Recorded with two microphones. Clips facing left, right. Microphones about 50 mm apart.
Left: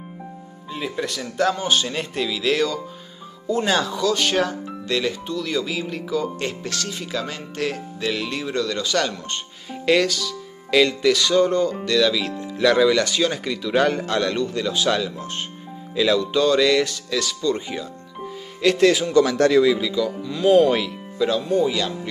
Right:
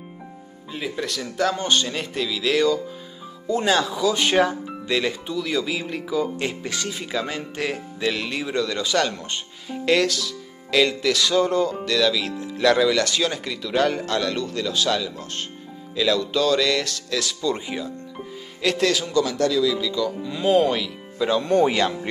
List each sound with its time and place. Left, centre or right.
0.7 s speech: centre
19.2 s speech: left
19.8 s speech: centre
20.2 s speech: centre
21.4 s speech: right